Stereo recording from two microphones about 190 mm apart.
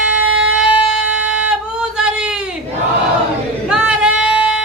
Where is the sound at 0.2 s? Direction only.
90° right.